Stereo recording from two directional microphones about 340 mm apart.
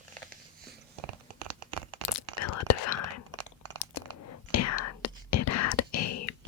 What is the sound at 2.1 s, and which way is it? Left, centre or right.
Whispering, left.